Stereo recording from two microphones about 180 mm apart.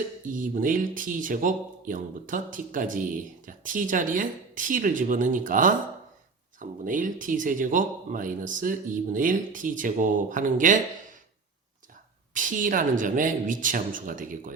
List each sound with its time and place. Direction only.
0.3 s speech: 50° right (ahead or behind)
12.3 s speech: 45° right (ahead or behind)